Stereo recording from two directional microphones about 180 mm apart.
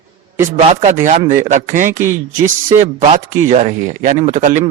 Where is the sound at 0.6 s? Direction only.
40° right (ahead or behind).